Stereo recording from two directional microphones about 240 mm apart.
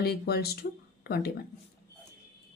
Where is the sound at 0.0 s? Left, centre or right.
Left.